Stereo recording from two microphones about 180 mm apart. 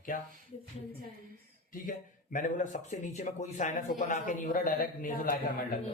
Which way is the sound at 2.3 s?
40° left (ahead or behind).